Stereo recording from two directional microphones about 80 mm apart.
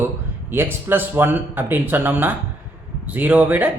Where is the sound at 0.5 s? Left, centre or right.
Right.